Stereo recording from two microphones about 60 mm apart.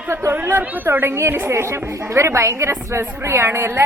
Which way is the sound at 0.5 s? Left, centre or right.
Right.